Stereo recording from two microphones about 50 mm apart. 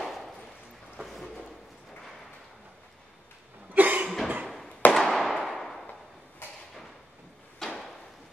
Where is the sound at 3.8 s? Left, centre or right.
Right.